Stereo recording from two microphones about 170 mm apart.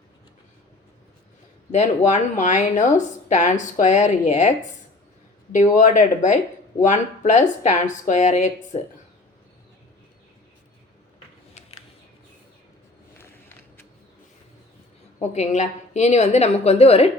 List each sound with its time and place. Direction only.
1.7 s speech: 45° left (ahead or behind)
15.2 s a woman's voice: 45° left (ahead or behind)